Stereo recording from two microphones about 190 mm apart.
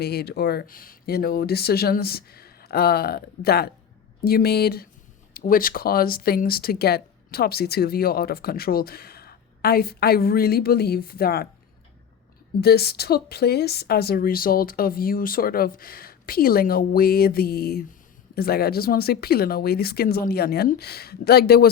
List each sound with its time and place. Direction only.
0.0 s speech: 55° left (ahead or behind)
12.5 s speech: 55° left (ahead or behind)